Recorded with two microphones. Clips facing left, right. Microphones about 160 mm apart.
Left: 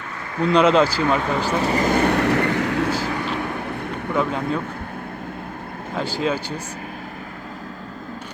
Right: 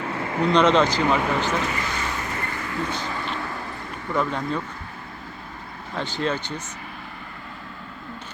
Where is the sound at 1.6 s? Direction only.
35° left (ahead or behind).